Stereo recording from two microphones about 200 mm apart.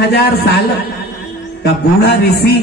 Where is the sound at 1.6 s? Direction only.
55° left (ahead or behind).